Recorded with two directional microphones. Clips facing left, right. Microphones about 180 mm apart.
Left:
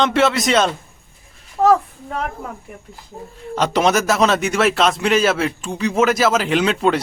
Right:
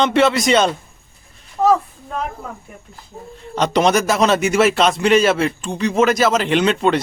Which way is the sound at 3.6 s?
Centre (ahead or behind).